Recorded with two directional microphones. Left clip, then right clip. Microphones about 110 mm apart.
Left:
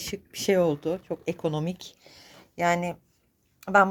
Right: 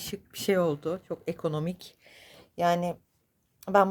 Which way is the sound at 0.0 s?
20° right (ahead or behind).